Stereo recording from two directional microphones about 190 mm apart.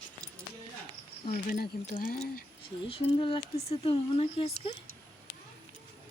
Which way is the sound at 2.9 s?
30° left (ahead or behind).